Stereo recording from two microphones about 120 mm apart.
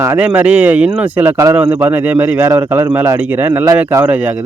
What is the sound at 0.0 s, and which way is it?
Speech, 15° right (ahead or behind).